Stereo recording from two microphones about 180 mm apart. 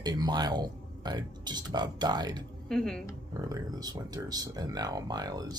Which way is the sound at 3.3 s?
20° right (ahead or behind).